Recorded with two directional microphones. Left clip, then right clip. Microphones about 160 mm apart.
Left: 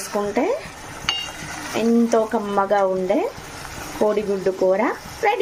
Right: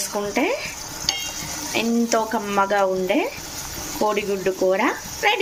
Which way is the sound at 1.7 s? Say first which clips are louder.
Left 3 dB; 20° left (ahead or behind).